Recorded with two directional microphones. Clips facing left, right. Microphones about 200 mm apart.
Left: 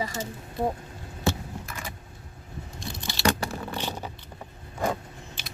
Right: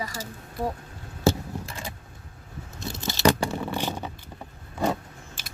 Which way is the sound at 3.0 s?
45° right (ahead or behind).